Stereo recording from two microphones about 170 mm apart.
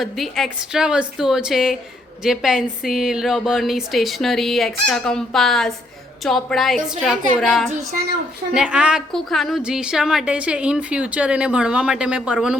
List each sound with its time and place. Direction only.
0.0 s a woman's voice: centre (ahead or behind)